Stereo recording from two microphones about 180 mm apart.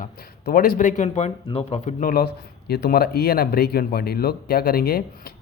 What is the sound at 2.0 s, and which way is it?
A man's voice, 55° left (ahead or behind).